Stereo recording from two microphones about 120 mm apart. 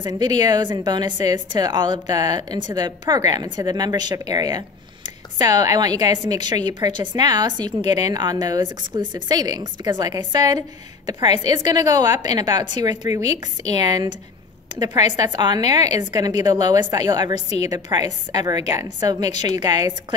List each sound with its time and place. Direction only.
0.0 s a woman's voice: 35° right (ahead or behind)
15.1 s a woman's voice: 35° right (ahead or behind)